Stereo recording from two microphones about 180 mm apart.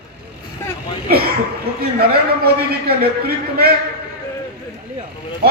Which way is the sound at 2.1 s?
60° right (ahead or behind).